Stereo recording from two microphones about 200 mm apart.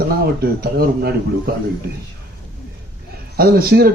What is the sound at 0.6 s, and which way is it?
Speech, 50° right (ahead or behind).